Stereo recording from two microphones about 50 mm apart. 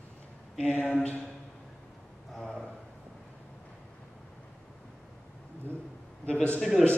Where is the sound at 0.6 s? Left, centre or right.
Left.